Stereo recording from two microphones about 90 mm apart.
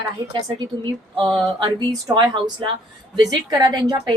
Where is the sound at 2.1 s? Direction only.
60° right (ahead or behind).